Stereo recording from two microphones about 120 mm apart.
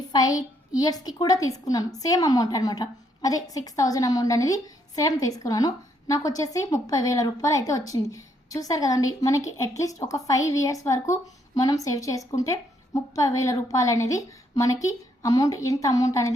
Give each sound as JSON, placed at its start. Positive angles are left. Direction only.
{"t": 0.1, "sound": "a woman's voice", "side_deg": 30}